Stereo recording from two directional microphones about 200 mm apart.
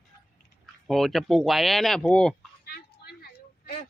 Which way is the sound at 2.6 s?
50° left (ahead or behind).